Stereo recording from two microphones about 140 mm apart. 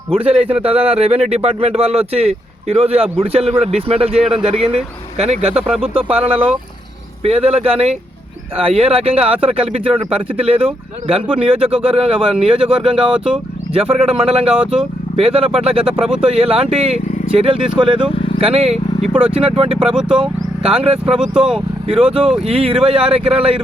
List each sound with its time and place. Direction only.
0.1 s a man's voice: 45° right (ahead or behind)
18.1 s vehicle: 40° left (ahead or behind)
18.3 s a man's voice: 45° right (ahead or behind)